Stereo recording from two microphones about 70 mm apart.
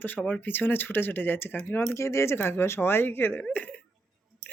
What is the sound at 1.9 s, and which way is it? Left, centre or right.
Speech, left.